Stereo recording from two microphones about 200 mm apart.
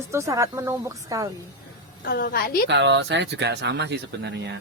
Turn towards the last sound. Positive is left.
turn(degrees=-60)  # may be behind; listen again after turning